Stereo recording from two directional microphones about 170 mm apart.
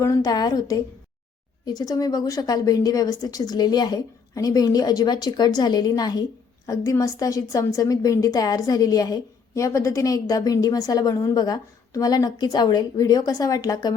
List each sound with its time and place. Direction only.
0.0 s a woman's voice: 20° left (ahead or behind)